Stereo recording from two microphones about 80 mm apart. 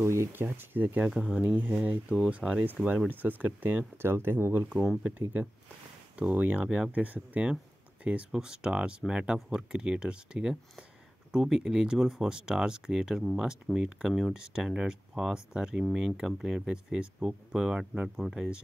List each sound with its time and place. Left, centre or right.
0.0 s speech: right
4.7 s speech: centre
6.1 s speech: centre
13.2 s speech: centre
13.8 s speech: centre
14.1 s speech: centre